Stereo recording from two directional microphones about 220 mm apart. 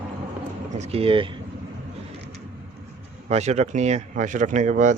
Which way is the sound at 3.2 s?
30° right (ahead or behind).